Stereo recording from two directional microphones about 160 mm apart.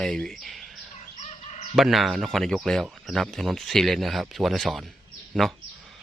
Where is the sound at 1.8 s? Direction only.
Centre (ahead or behind).